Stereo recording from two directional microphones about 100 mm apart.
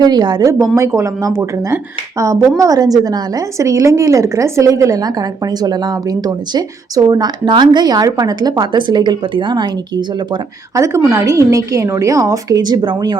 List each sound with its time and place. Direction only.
0.0 s speech: 45° right (ahead or behind)
0.8 s speech: 30° right (ahead or behind); by 10.4 s 50° right (ahead or behind)
10.8 s speech: 30° right (ahead or behind); by 13.1 s 50° right (ahead or behind)